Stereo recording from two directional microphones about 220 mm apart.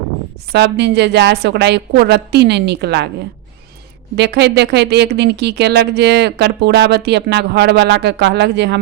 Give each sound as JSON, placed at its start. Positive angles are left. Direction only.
{"t": 0.5, "sound": "speech", "side_deg": -50}
{"t": 4.1, "sound": "speech", "side_deg": -50}